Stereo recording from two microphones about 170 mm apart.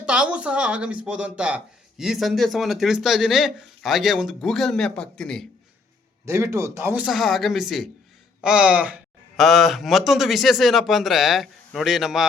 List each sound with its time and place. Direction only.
0.0 s speech: 5° right (ahead or behind)
6.2 s speech: 15° right (ahead or behind)
7.0 s speech: centre (ahead or behind)